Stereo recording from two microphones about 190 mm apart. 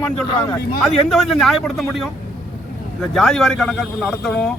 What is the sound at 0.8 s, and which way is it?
Speech, centre (ahead or behind).